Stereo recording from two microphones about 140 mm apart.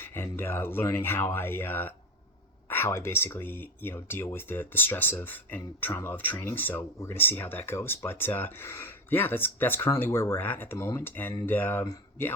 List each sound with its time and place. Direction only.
0.0 s speech: 15° left (ahead or behind)